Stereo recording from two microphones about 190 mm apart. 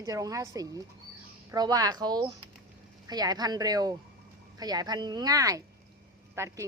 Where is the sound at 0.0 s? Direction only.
20° right (ahead or behind).